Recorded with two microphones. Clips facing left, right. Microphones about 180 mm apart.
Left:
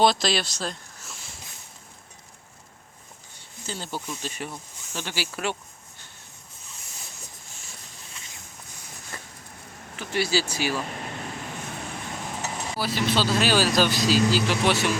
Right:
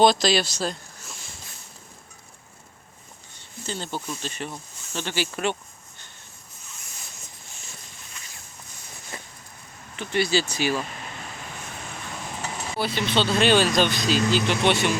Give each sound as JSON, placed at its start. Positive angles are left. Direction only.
{"t": 0.0, "sound": "speech", "side_deg": 0}
{"t": 3.7, "sound": "speech", "side_deg": 5}
{"t": 8.1, "sound": "a sound", "side_deg": 25}
{"t": 9.1, "sound": "a sound", "side_deg": -15}
{"t": 9.9, "sound": "speech", "side_deg": 5}
{"t": 12.8, "sound": "speech", "side_deg": 5}